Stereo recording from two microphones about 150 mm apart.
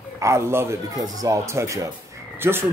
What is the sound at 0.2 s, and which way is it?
Speech, 20° right (ahead or behind).